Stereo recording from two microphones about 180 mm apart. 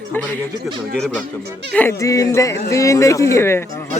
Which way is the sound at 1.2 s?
65° right (ahead or behind).